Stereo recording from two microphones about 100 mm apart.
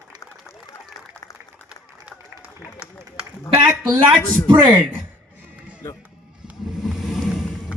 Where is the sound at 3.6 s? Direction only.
35° right (ahead or behind).